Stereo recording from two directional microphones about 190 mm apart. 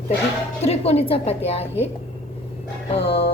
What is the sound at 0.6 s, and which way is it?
A woman's voice, 35° left (ahead or behind).